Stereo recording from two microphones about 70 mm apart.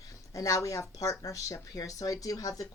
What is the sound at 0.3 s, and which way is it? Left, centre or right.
A woman's voice, left.